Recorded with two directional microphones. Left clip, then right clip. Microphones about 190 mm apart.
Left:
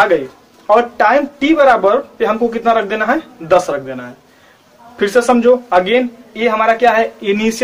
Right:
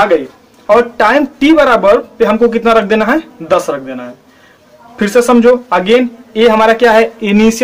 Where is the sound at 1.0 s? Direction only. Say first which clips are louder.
Right 2 dB; 50° right (ahead or behind).